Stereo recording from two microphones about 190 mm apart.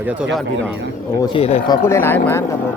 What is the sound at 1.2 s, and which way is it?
Speech, 30° left (ahead or behind).